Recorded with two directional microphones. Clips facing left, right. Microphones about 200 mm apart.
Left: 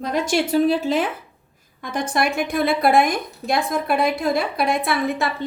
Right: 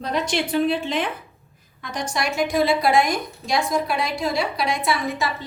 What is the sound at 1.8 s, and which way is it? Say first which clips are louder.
A woman's voice: left 4 dB; 55° left (ahead or behind).